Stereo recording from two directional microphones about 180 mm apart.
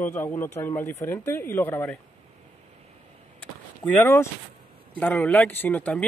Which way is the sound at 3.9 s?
10° left (ahead or behind).